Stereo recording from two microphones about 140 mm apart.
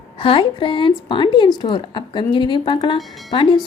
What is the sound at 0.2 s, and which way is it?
A woman's voice, 40° left (ahead or behind).